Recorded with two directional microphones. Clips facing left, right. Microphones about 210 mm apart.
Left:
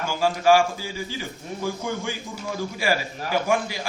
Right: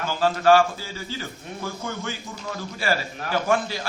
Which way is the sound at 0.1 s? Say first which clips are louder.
Right 1 dB; 10° left (ahead or behind).